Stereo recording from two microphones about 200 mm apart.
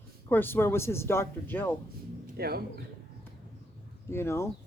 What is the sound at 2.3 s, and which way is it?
Speech, 50° right (ahead or behind).